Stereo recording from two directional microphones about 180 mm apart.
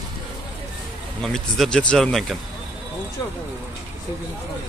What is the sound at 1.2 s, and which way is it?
Speech, centre (ahead or behind).